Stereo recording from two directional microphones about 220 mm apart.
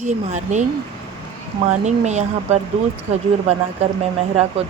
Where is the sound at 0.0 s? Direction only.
35° right (ahead or behind).